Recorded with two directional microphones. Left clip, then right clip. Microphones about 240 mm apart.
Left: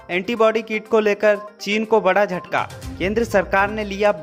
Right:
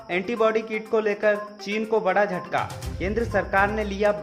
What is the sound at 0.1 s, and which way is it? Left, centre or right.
Speech, left.